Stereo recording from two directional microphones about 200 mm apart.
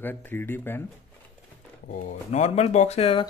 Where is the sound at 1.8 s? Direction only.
40° left (ahead or behind).